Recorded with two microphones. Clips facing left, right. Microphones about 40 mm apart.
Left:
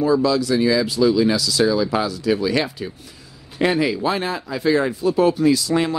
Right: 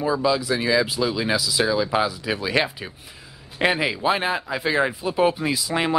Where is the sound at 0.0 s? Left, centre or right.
Centre.